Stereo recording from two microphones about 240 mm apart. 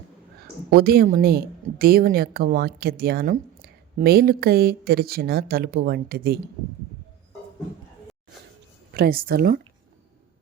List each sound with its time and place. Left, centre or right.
0.7 s a woman's voice: right
8.9 s a woman's voice: right